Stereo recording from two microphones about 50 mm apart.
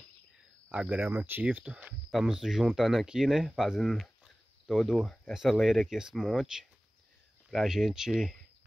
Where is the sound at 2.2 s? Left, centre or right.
Centre.